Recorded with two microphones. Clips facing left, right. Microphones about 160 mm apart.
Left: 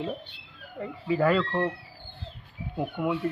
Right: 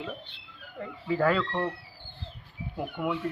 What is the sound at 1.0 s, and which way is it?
Speech, 15° left (ahead or behind).